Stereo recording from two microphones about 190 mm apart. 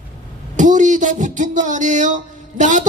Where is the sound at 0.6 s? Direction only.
40° right (ahead or behind).